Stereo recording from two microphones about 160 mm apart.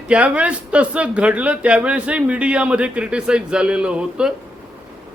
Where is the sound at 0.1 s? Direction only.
10° right (ahead or behind).